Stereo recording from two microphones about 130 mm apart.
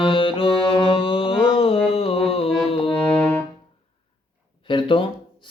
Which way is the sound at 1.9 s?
50° left (ahead or behind).